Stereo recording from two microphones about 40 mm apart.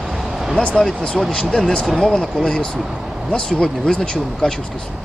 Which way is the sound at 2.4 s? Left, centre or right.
Centre.